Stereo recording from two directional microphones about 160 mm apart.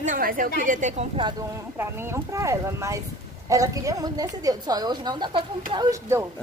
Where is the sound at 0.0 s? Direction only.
60° right (ahead or behind).